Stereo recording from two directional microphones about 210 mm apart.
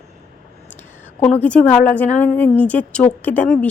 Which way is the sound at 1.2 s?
5° left (ahead or behind).